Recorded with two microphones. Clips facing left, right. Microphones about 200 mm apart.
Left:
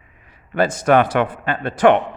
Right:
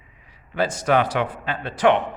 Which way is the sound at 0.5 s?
55° left (ahead or behind).